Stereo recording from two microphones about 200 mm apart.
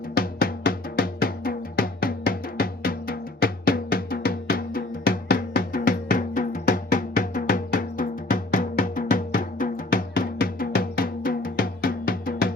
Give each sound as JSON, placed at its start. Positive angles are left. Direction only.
{"t": 0.1, "sound": "drum", "side_deg": 50}